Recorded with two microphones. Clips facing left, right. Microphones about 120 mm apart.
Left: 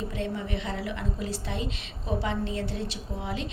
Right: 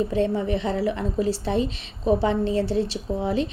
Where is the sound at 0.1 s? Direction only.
35° right (ahead or behind).